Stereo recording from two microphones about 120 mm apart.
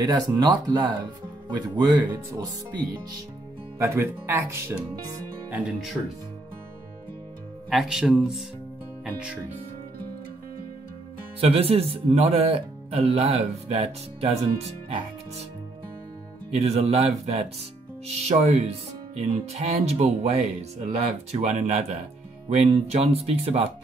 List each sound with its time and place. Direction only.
0.0 s speech: 35° right (ahead or behind)
3.7 s speech: 20° right (ahead or behind)
7.7 s speech: centre (ahead or behind)
11.3 s speech: 55° right (ahead or behind)
16.6 s speech: 60° right (ahead or behind)